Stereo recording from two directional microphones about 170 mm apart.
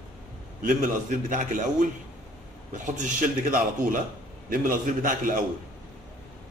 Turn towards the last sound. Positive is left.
turn(degrees=-55)  # may be behind; listen again after turning